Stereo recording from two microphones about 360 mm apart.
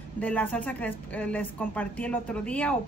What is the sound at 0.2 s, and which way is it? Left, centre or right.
A woman's voice, centre.